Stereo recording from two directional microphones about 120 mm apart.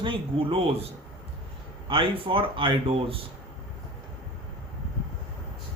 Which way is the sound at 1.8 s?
45° right (ahead or behind).